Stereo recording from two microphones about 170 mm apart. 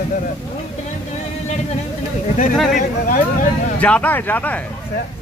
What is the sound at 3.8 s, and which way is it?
Speech, 10° left (ahead or behind).